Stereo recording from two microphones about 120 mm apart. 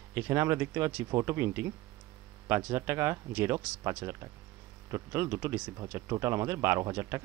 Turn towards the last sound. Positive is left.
turn(degrees=-25)  # may be behind; listen again after turning